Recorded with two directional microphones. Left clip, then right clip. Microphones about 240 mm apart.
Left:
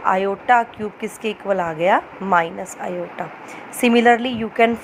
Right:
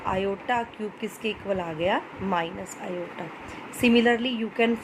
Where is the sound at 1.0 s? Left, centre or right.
Left.